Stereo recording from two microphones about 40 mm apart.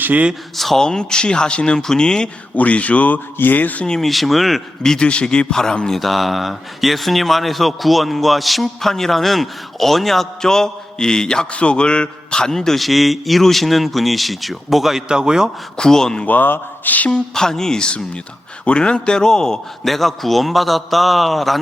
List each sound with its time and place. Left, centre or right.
0.5 s a man's voice: centre
0.8 s speech: centre
2.6 s speech: left
3.3 s speech: left
4.0 s a man's voice: centre
4.8 s a man's voice: centre
5.9 s a man's voice: centre; by 12.5 s left
12.5 s a man's voice: centre
15.1 s a man's voice: centre
15.8 s a man's voice: centre
16.2 s speech: left
17.1 s speech: centre
19.8 s a man's voice: centre